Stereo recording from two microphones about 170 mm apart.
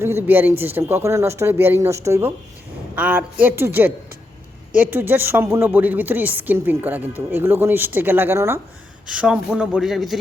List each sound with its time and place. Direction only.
0.0 s speech: 15° right (ahead or behind)
9.0 s speech: 5° right (ahead or behind)